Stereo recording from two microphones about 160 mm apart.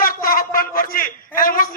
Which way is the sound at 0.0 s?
60° left (ahead or behind).